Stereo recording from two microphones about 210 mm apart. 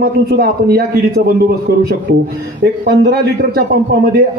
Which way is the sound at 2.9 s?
50° right (ahead or behind).